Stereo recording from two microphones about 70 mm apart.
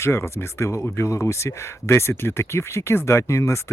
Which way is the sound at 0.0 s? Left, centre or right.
Left.